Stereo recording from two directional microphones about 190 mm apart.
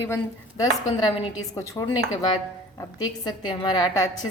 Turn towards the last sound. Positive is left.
turn(degrees=20)  # may be behind; listen again after turning